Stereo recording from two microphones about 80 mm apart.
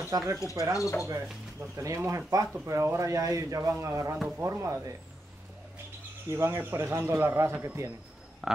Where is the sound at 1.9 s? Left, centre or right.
Right.